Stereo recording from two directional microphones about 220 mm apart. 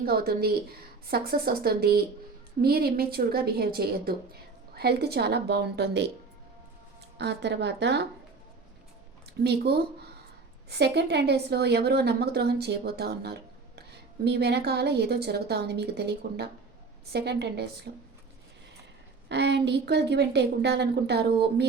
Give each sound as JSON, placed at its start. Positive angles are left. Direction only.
{"t": 0.0, "sound": "a woman's voice", "side_deg": -45}
{"t": 7.2, "sound": "a woman's voice", "side_deg": -50}
{"t": 9.4, "sound": "a woman's voice", "side_deg": -45}
{"t": 19.3, "sound": "a woman's voice", "side_deg": -50}